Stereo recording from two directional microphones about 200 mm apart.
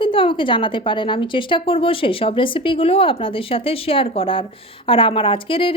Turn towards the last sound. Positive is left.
turn(degrees=25)  # may be behind; listen again after turning